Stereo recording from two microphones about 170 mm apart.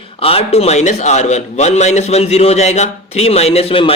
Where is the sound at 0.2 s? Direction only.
35° left (ahead or behind).